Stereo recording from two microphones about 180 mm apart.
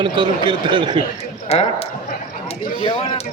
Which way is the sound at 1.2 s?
35° left (ahead or behind).